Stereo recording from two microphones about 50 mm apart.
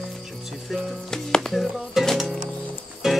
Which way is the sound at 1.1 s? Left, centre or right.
Centre.